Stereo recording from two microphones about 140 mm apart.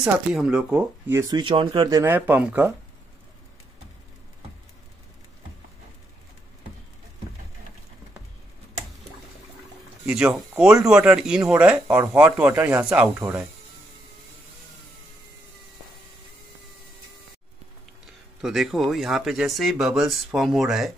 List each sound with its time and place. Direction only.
0.0 s speech: 5° right (ahead or behind)
1.3 s speech: 35° right (ahead or behind)
2.0 s speech: 15° right (ahead or behind)
10.0 s speech: 5° right (ahead or behind)
18.0 s speech: centre (ahead or behind)